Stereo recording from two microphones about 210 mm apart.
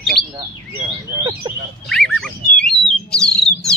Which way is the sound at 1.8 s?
Centre (ahead or behind).